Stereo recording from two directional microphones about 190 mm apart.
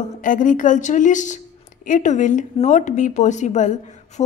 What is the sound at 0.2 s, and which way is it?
A woman's voice, 45° left (ahead or behind).